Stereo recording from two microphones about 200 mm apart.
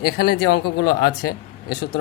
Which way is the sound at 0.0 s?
50° left (ahead or behind).